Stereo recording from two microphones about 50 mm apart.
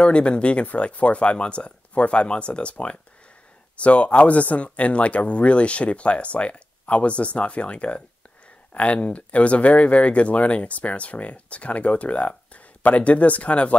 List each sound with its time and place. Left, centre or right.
0.0 s speech: centre